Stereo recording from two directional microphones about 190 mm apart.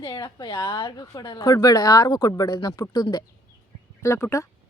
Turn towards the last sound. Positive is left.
turn(degrees=15)  # may be behind; listen again after turning